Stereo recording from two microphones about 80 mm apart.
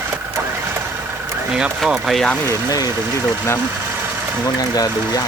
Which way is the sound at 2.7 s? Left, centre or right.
Left.